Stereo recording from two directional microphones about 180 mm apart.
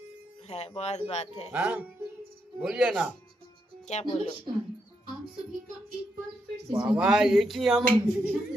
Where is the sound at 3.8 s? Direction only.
40° left (ahead or behind).